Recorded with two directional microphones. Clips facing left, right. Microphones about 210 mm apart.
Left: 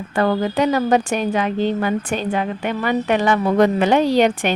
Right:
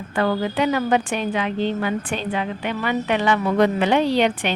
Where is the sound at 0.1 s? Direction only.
40° left (ahead or behind).